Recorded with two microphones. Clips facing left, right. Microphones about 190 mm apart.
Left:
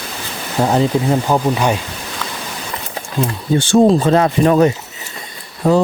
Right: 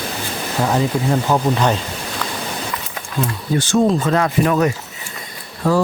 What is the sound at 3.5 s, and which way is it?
Speech, 30° left (ahead or behind).